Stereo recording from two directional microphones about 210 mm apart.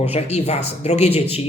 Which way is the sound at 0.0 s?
30° left (ahead or behind).